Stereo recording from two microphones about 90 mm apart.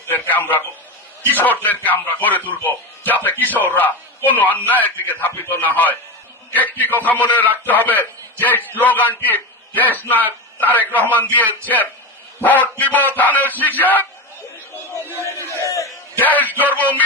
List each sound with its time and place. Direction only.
0.1 s a man's voice: 20° left (ahead or behind)
15.4 s a sound: 35° left (ahead or behind)
16.2 s a man's voice: 20° left (ahead or behind)